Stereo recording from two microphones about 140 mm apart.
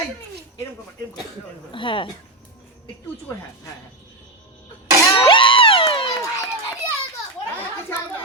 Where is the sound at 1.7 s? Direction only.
35° left (ahead or behind).